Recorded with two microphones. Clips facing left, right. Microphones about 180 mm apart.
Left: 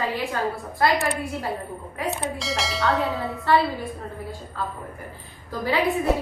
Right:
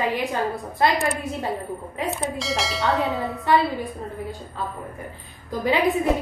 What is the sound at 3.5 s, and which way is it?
A woman's voice, 15° right (ahead or behind).